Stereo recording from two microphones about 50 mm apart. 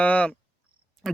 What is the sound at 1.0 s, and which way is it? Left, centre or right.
Speech, centre.